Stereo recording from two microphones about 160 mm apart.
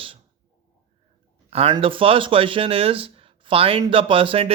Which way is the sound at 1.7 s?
35° right (ahead or behind).